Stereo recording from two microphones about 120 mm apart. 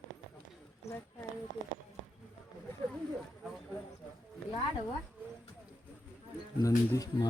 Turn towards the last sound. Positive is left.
turn(degrees=30)  # may be behind; listen again after turning